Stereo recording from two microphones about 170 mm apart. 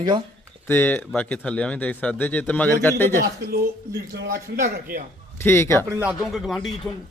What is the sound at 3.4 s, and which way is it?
A man's voice, 70° right (ahead or behind).